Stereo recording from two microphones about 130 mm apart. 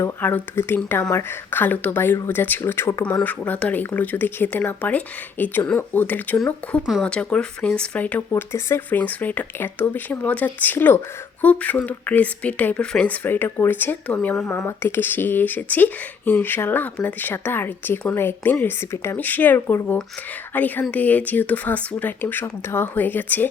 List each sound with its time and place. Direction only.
0.0 s speech: 15° left (ahead or behind)